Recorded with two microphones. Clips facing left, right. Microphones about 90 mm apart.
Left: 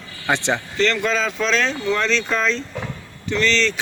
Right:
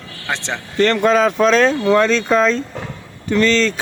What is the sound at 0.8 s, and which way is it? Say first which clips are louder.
Speech: right 9 dB; 50° right (ahead or behind).